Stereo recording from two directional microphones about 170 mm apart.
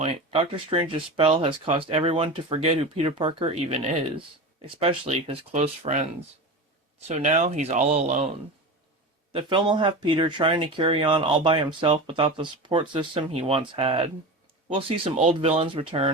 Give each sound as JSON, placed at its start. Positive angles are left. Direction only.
{"t": 0.0, "sound": "speech", "side_deg": -35}
{"t": 7.1, "sound": "speech", "side_deg": -45}
{"t": 9.3, "sound": "speech", "side_deg": -30}